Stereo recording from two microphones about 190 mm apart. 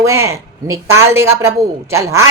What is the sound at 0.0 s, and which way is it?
A woman's voice, 15° right (ahead or behind).